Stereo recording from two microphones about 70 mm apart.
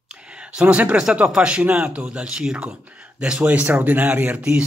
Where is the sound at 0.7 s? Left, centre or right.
Centre.